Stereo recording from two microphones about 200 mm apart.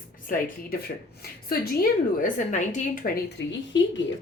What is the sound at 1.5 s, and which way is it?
A woman's voice, 45° left (ahead or behind).